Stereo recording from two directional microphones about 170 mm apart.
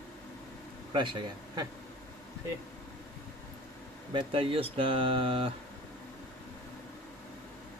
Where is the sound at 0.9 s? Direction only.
25° right (ahead or behind).